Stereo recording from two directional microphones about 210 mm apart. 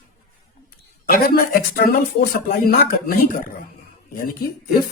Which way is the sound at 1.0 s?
45° left (ahead or behind).